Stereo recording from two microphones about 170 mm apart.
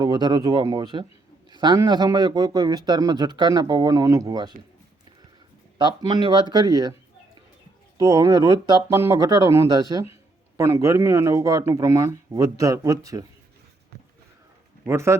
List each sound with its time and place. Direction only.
0.0 s a man's voice: 25° right (ahead or behind)
5.7 s a man's voice: 25° right (ahead or behind)
7.9 s a man's voice: 20° right (ahead or behind)
14.8 s speech: 15° right (ahead or behind)